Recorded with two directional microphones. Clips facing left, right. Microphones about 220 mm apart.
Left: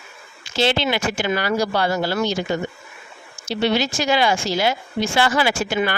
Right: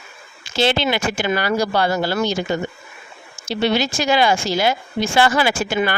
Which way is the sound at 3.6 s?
45° right (ahead or behind).